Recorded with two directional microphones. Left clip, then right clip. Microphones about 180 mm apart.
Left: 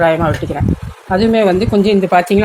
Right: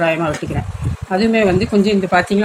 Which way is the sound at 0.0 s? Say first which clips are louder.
Left 4 dB; 30° left (ahead or behind).